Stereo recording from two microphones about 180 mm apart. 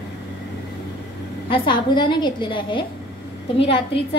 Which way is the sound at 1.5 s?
25° left (ahead or behind).